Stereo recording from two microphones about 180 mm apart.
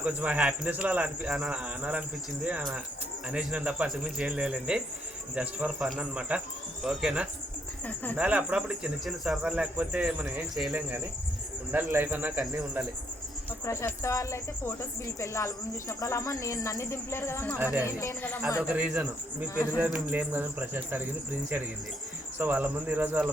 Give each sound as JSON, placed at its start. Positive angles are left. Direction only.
{"t": 0.0, "sound": "speech", "side_deg": -5}
{"t": 13.7, "sound": "speech", "side_deg": 15}
{"t": 18.7, "sound": "speech", "side_deg": -10}
{"t": 22.4, "sound": "speech", "side_deg": -10}